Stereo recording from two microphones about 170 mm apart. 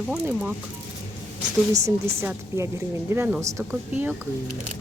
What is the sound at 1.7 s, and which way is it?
Speech, 15° right (ahead or behind).